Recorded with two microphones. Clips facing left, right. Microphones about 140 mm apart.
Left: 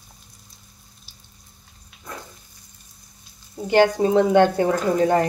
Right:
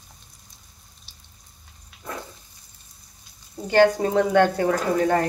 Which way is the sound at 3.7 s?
20° left (ahead or behind).